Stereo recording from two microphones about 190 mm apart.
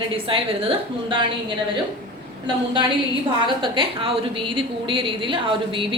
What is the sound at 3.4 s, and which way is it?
Speech, 25° right (ahead or behind).